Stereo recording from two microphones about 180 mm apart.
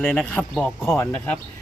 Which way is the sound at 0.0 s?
5° left (ahead or behind).